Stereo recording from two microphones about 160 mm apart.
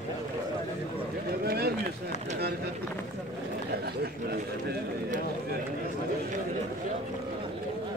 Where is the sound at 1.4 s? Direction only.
80° right.